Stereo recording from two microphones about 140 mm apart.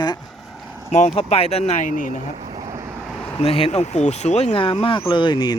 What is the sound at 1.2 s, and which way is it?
Speech, 45° left (ahead or behind).